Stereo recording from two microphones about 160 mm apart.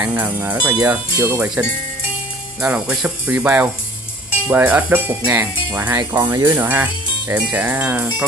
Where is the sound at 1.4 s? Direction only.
5° right (ahead or behind).